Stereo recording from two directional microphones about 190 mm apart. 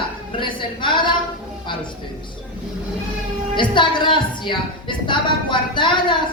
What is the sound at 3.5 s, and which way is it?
A woman's voice, 25° left (ahead or behind).